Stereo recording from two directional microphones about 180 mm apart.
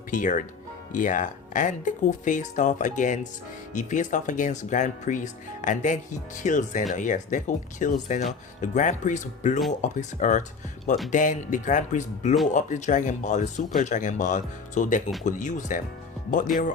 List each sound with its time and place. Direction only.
0.1 s speech: 45° left (ahead or behind)